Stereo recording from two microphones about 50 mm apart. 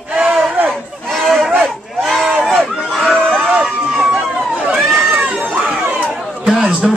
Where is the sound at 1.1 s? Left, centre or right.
Centre.